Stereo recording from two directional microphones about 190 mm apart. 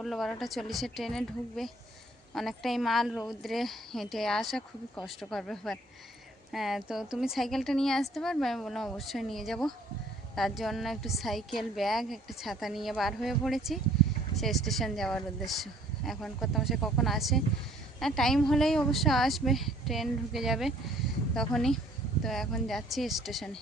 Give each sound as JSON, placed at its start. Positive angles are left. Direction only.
{"t": 0.0, "sound": "a woman's voice", "side_deg": 0}